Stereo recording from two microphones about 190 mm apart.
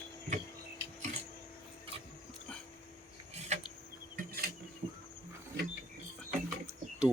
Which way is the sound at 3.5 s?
35° right (ahead or behind).